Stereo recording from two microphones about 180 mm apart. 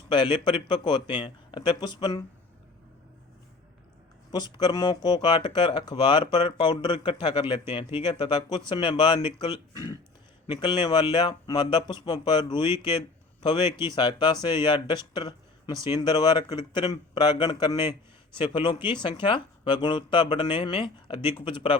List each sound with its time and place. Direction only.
0.1 s speech: 25° left (ahead or behind)
4.3 s a man's voice: 25° left (ahead or behind)